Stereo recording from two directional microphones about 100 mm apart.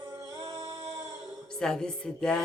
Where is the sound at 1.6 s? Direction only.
5° left (ahead or behind).